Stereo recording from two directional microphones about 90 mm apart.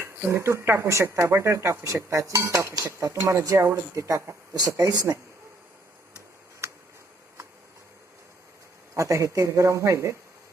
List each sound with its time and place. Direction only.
0.0 s speech: 30° right (ahead or behind)
4.5 s speech: 45° right (ahead or behind)
6.6 s a sound: 30° right (ahead or behind)
9.0 s speech: 35° right (ahead or behind)